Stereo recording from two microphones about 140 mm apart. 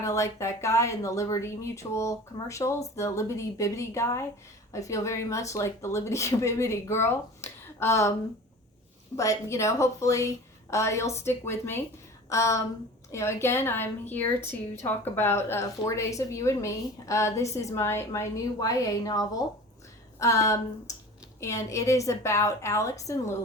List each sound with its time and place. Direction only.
0.0 s a woman's voice: 20° left (ahead or behind)
9.1 s a woman's voice: 20° left (ahead or behind)